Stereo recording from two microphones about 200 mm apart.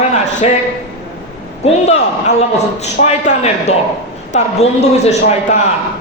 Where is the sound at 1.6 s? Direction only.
35° left (ahead or behind).